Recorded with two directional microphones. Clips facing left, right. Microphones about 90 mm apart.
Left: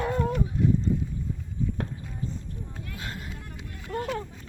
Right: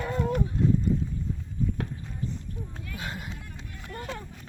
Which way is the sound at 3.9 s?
90° left.